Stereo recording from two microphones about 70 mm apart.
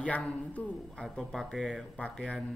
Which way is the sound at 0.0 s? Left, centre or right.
Centre.